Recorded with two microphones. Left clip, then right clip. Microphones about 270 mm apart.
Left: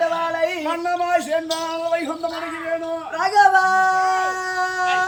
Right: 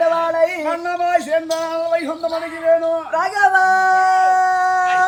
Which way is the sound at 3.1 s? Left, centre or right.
Centre.